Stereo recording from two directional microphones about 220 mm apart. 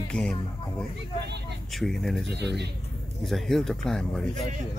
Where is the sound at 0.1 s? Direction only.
5° left (ahead or behind).